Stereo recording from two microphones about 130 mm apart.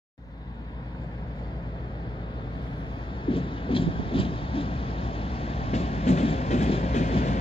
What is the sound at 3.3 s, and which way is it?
Vehicle, 40° left (ahead or behind).